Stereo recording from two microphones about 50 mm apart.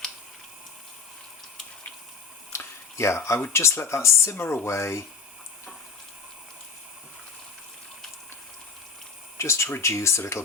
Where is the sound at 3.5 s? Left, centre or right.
Left.